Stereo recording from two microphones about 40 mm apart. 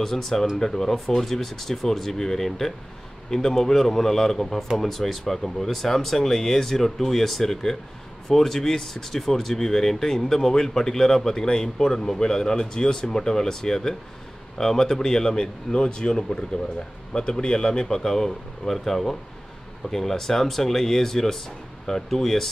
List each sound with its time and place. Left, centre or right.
0.0 s speech: centre